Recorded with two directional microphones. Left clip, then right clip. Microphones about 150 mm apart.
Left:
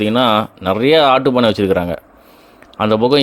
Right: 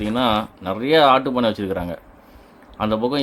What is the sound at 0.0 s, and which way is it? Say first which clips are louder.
Speech: left 7 dB; 50° left (ahead or behind).